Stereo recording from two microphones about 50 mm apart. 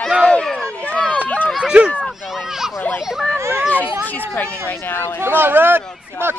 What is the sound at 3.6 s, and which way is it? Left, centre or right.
Speech, left.